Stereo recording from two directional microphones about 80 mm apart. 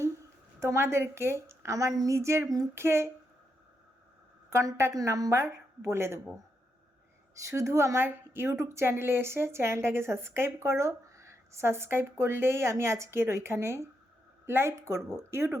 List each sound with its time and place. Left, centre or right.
0.6 s a woman's voice: right
4.4 s a woman's voice: right
4.9 s a woman's voice: right
7.3 s a woman's voice: right